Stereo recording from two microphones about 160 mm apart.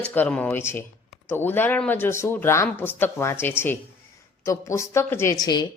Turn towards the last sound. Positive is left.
turn(degrees=25)  # may be behind; listen again after turning